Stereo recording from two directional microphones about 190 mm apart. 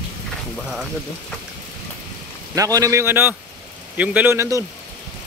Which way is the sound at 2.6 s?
15° right (ahead or behind).